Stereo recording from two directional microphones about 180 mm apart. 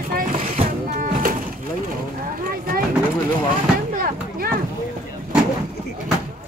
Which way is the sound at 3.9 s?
55° right (ahead or behind).